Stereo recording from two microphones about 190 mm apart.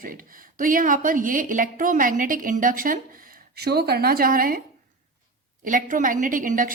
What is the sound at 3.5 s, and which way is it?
A woman's voice, 60° right (ahead or behind).